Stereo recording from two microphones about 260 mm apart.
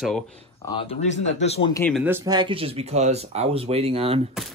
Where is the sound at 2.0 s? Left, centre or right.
Centre.